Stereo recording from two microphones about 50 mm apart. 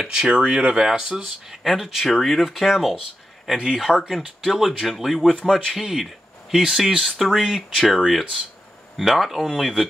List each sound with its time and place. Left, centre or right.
0.0 s speech: centre
3.4 s speech: centre
7.1 s speech: centre
7.3 s speech: centre